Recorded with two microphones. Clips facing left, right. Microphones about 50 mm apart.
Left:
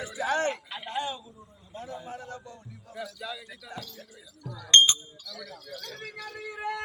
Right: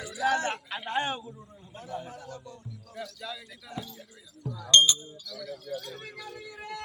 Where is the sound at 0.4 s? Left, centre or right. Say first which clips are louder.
Left 1 dB; right.